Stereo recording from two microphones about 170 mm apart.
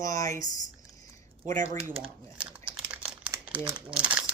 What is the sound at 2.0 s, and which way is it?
Crumpling, 5° right (ahead or behind).